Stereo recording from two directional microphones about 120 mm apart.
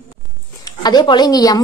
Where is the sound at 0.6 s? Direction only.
35° left (ahead or behind).